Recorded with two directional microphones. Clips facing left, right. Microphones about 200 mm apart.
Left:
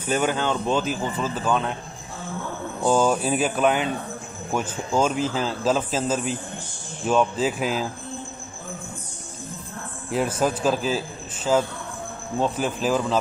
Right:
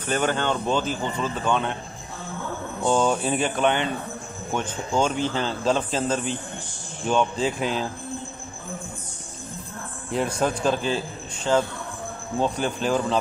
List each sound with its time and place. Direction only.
0.0 s speech: 10° left (ahead or behind)
2.8 s speech: 5° left (ahead or behind)
10.1 s speech: 5° left (ahead or behind)